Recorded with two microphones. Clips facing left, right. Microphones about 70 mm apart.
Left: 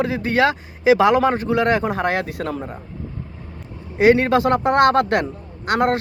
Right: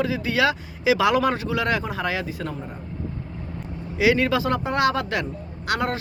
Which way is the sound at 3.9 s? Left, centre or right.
Left.